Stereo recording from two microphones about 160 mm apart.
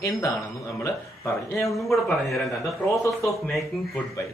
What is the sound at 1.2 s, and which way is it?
Speech, 15° left (ahead or behind).